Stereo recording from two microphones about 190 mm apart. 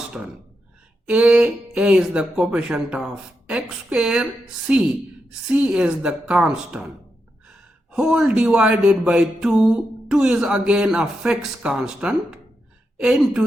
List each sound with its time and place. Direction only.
0.1 s speech: 5° right (ahead or behind)
7.9 s speech: 5° right (ahead or behind)